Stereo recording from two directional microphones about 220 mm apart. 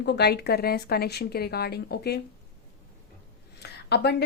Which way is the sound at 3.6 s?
50° left (ahead or behind).